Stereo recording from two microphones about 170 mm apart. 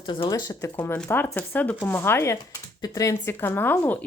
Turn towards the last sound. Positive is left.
turn(degrees=10)  # may be behind; listen again after turning